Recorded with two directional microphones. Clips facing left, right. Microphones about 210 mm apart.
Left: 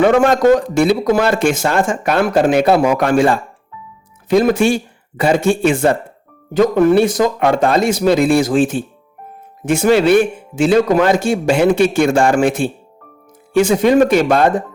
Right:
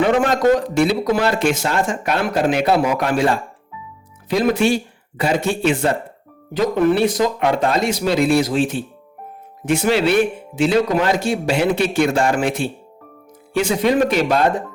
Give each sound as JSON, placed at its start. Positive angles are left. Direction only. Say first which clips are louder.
{"t": 0.2, "sound": "speech", "louder": "left 4 dB", "side_deg": 50}
{"t": 4.3, "sound": "speech", "louder": "left 4 dB", "side_deg": 50}